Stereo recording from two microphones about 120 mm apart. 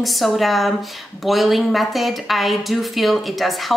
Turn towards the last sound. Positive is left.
turn(degrees=0)  # may be behind; listen again after turning